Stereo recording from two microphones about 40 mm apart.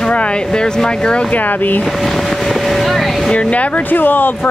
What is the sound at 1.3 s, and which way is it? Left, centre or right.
Speech, left.